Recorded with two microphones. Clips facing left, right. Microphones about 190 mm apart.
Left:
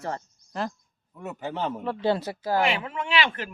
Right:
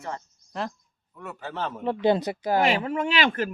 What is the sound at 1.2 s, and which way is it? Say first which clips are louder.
Speech: left 2 dB; 15° left (ahead or behind).